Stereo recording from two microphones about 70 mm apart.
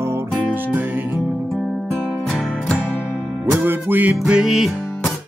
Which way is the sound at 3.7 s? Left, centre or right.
Right.